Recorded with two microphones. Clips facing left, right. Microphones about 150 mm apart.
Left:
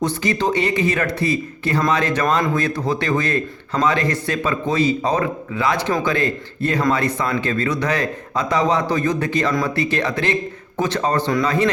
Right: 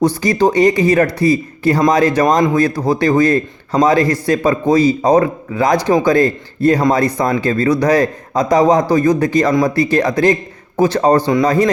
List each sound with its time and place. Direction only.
0.2 s speech: 40° right (ahead or behind)